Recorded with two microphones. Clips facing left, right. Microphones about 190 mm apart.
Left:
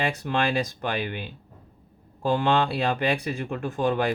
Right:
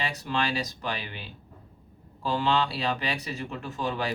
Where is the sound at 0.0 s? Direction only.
55° left (ahead or behind).